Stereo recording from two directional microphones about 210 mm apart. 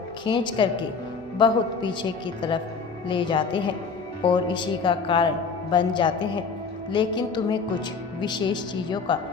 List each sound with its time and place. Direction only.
0.3 s a woman's voice: 20° left (ahead or behind)